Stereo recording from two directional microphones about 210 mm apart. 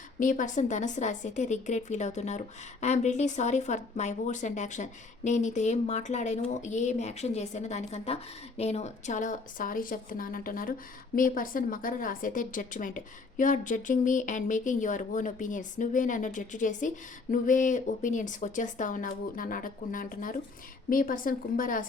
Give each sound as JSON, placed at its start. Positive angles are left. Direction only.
{"t": 0.2, "sound": "speech", "side_deg": 40}